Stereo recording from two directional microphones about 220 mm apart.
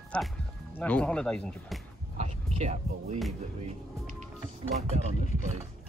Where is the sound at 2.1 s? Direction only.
30° right (ahead or behind).